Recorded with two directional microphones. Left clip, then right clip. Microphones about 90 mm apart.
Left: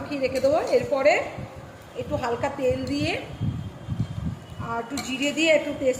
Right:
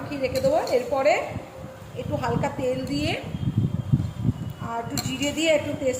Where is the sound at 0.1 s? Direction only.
50° left (ahead or behind).